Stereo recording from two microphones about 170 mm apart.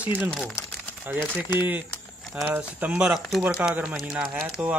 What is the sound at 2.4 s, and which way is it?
Speech, 10° right (ahead or behind).